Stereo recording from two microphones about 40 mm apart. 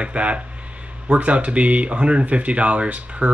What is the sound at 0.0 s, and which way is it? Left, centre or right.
Speech, right.